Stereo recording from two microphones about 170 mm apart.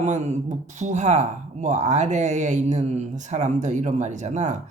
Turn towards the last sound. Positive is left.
turn(degrees=-45)  # may be behind; listen again after turning